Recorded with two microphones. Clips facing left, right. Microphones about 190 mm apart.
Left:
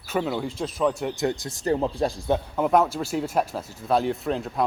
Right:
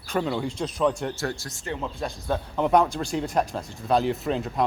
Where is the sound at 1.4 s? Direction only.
35° left (ahead or behind).